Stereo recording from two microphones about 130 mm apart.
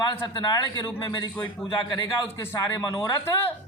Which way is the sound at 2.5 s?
20° left (ahead or behind).